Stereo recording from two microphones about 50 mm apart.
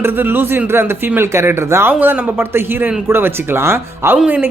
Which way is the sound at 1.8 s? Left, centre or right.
Right.